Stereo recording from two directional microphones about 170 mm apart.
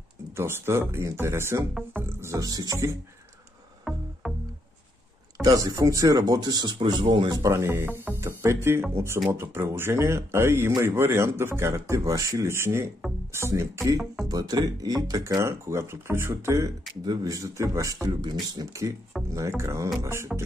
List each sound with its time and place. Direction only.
0.4 s speech: 15° right (ahead or behind)
3.9 s music: centre (ahead or behind)
5.4 s speech: 20° right (ahead or behind)